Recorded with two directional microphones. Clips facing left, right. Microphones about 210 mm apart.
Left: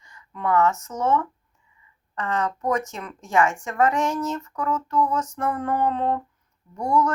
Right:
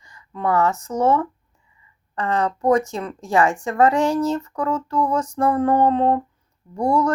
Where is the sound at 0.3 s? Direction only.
35° right (ahead or behind).